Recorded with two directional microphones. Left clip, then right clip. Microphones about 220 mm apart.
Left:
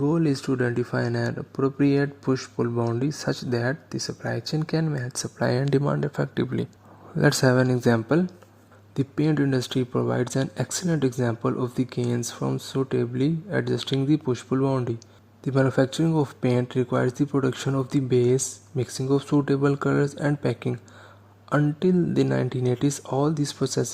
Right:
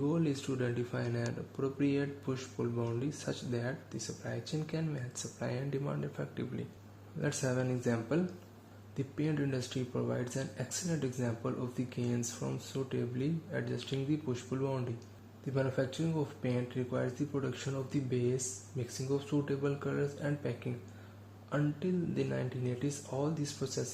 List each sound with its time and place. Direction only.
0.0 s speech: 45° left (ahead or behind)